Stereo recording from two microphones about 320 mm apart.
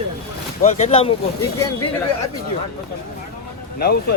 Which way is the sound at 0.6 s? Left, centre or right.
Centre.